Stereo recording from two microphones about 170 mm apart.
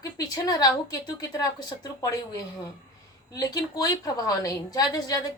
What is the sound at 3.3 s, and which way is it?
A woman's voice, 20° left (ahead or behind).